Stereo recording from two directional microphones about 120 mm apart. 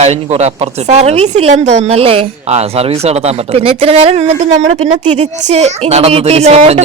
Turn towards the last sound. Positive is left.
turn(degrees=-60)  # may be behind; listen again after turning